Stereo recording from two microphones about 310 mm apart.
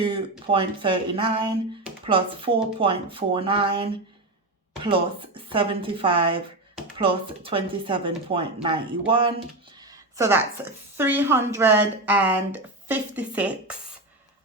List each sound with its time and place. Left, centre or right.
0.0 s speech: centre